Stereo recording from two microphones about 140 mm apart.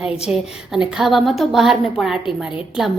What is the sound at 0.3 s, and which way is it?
A woman's voice, 5° right (ahead or behind).